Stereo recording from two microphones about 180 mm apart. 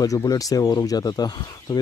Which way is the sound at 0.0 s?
20° left (ahead or behind).